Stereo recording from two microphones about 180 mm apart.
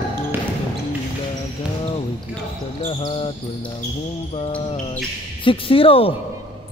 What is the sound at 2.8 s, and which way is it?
Speech, 30° left (ahead or behind).